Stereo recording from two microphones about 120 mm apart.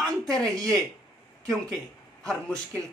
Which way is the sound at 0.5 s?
30° right (ahead or behind).